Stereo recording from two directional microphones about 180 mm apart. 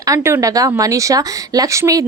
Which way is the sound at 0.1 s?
20° right (ahead or behind).